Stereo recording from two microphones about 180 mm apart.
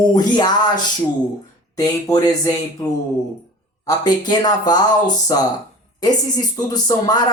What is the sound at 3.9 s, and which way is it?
Speech, 20° left (ahead or behind).